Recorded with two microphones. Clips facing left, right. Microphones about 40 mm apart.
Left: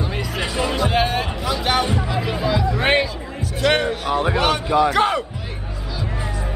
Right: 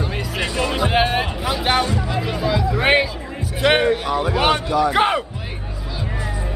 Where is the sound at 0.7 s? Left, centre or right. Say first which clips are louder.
Right 2 dB; centre.